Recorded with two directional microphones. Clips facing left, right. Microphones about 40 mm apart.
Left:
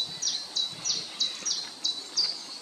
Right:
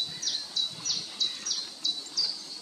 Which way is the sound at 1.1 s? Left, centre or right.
Centre.